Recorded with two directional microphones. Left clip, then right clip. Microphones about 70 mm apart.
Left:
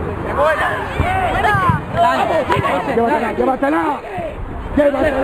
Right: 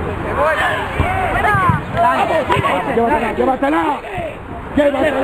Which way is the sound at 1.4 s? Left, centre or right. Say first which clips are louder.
Right 1 dB; left.